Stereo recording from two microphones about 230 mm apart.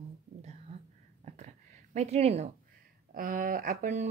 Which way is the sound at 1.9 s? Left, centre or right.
Right.